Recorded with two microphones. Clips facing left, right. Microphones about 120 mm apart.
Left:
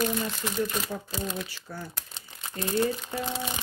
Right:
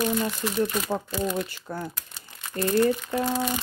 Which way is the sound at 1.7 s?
50° right (ahead or behind).